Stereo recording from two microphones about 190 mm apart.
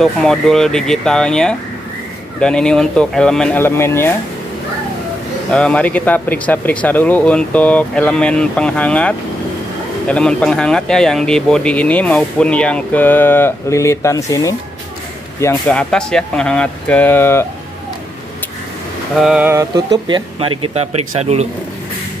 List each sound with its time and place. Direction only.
0.0 s speech: centre (ahead or behind)
5.5 s speech: 5° left (ahead or behind)
15.4 s speech: 5° left (ahead or behind)
19.1 s speech: 5° right (ahead or behind); by 21.5 s 35° right (ahead or behind)